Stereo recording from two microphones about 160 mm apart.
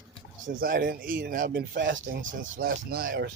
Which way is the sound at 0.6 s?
60° right (ahead or behind).